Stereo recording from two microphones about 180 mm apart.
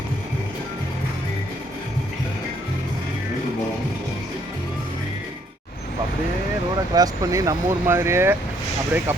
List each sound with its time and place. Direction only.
6.9 s speech: 20° right (ahead or behind)